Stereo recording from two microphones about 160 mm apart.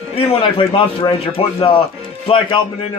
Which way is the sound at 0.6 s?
35° left (ahead or behind).